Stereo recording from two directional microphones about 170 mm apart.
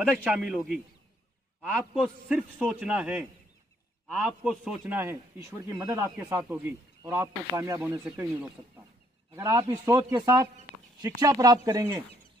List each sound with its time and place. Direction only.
0.0 s a man's voice: 5° right (ahead or behind); by 12.0 s 20° right (ahead or behind)